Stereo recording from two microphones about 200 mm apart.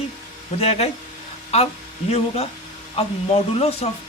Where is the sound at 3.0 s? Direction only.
30° left (ahead or behind).